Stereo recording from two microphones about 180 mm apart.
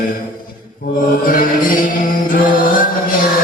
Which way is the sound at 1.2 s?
50° left (ahead or behind).